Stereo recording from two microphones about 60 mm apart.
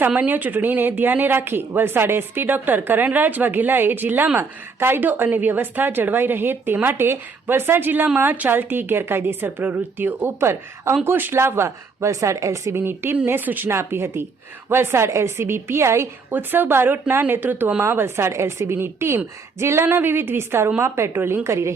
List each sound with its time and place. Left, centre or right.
0.2 s a woman's voice: right
12.7 s speech: right
13.7 s a woman's voice: right
16.3 s a woman's voice: right